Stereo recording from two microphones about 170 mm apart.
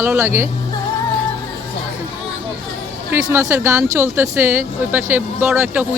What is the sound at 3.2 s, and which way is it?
Speech, 15° right (ahead or behind).